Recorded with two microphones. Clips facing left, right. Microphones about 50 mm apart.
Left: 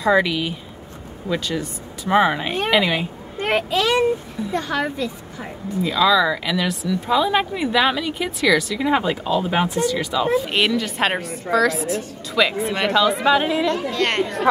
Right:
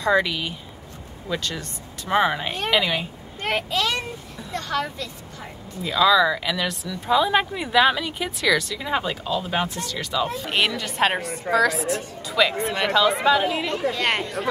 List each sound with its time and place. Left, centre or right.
0.0 s a woman's voice: centre
3.4 s a woman's voice: left
5.9 s speech: centre